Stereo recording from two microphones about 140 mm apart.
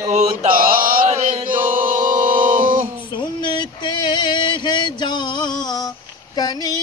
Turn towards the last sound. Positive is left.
turn(degrees=30)  # may be behind; listen again after turning